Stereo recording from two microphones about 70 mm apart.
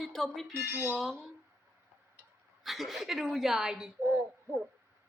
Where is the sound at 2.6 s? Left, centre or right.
Centre.